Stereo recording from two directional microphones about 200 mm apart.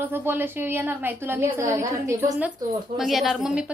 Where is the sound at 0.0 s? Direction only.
10° right (ahead or behind).